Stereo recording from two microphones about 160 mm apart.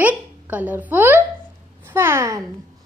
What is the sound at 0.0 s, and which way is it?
A woman's voice, 10° right (ahead or behind).